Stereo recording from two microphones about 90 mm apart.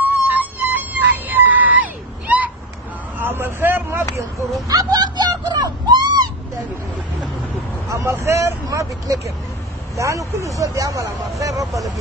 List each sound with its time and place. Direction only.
0.3 s music: 20° right (ahead or behind)
3.2 s vehicle: 25° right (ahead or behind)
4.6 s a sound: 50° right (ahead or behind)
7.9 s speech: 30° right (ahead or behind)
8.6 s speech: 45° right (ahead or behind)